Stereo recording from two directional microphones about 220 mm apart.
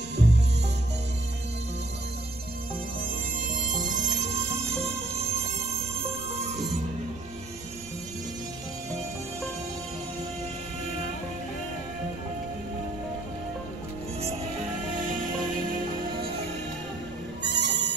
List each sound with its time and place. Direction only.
0.1 s music: 50° right (ahead or behind)
3.0 s music: 35° right (ahead or behind)
17.4 s insect: 55° right (ahead or behind)